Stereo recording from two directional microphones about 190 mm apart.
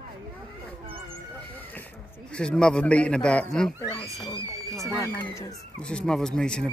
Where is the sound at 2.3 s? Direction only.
5° left (ahead or behind).